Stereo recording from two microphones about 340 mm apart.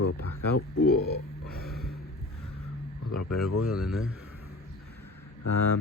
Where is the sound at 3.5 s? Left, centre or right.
Left.